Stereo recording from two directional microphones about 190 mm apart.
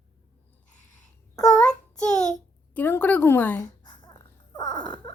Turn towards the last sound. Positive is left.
turn(degrees=20)  # may be behind; listen again after turning